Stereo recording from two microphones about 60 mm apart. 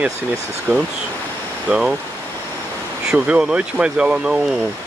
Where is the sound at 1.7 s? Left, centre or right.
Centre.